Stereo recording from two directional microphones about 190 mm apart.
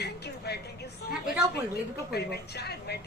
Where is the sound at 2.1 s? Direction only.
55° left (ahead or behind).